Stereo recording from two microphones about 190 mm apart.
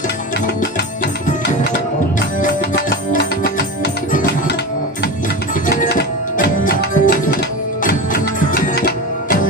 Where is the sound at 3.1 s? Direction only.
50° left (ahead or behind).